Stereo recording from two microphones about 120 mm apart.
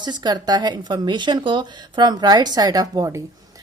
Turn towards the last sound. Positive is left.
turn(degrees=-25)  # may be behind; listen again after turning